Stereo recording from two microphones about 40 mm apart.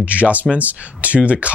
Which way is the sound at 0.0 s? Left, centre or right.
Right.